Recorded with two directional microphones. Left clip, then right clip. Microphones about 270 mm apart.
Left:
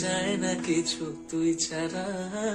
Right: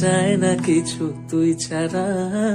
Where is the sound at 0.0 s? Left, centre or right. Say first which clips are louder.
Right 10 dB; right.